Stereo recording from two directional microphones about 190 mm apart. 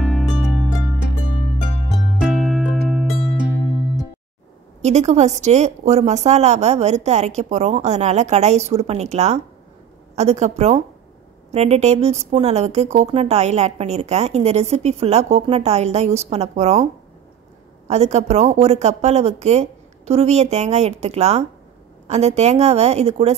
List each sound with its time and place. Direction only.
0.0 s harp: centre (ahead or behind)
2.1 s music: centre (ahead or behind)
4.8 s speech: 35° right (ahead or behind)
17.8 s speech: 35° right (ahead or behind)